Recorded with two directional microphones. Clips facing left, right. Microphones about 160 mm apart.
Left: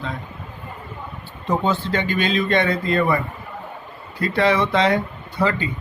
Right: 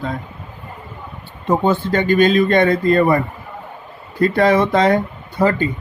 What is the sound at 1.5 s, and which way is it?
Speech, 50° right (ahead or behind).